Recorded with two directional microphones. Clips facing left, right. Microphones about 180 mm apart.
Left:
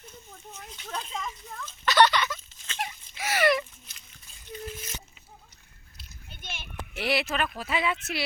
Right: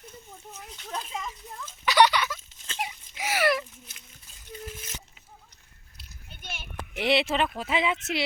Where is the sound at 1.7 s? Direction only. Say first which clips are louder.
Right 1 dB; 15° right (ahead or behind).